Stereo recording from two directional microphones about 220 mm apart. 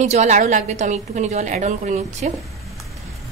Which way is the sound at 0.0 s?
30° right (ahead or behind).